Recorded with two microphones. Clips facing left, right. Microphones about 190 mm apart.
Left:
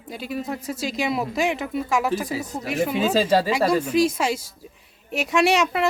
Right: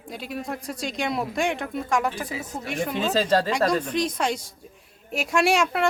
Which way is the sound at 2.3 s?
35° left (ahead or behind).